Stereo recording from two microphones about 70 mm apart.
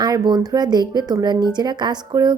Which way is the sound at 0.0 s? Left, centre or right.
Right.